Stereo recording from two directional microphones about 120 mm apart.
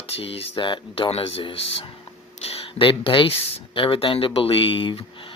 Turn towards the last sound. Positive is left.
turn(degrees=50)  # may be behind; listen again after turning